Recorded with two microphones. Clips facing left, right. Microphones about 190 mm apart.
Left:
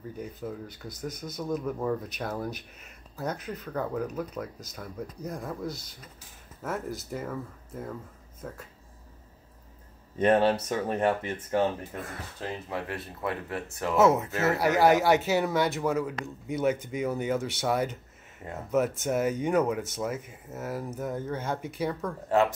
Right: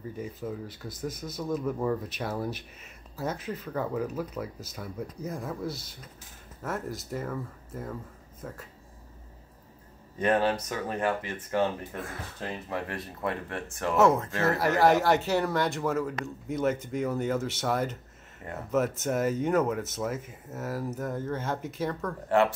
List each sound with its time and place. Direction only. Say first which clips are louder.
0.2 s speech: right 1 dB; centre (ahead or behind)
10.2 s speech: left 3 dB; 25° left (ahead or behind)
11.9 s speech: right 1 dB; centre (ahead or behind)